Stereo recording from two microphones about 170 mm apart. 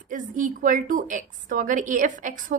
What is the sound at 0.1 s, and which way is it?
A woman's voice, 50° right (ahead or behind).